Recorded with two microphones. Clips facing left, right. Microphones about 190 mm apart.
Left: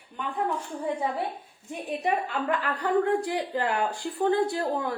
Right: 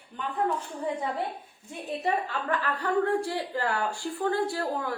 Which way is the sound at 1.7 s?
15° left (ahead or behind).